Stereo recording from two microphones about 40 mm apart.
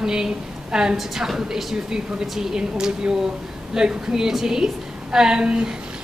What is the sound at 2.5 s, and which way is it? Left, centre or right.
A woman's voice, centre.